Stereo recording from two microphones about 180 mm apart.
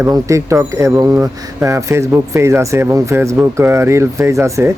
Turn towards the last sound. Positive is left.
turn(degrees=-15)  # may be behind; listen again after turning